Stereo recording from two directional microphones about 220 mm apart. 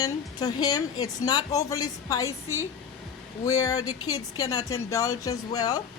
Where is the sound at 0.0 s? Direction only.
15° left (ahead or behind).